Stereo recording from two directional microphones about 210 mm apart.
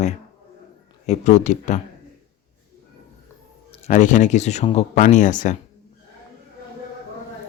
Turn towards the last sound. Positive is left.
turn(degrees=35)  # may be behind; listen again after turning